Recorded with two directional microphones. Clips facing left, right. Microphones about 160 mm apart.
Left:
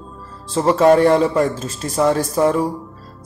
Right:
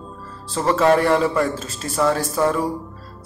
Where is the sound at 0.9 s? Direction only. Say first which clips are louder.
Left 4 dB; 30° left (ahead or behind).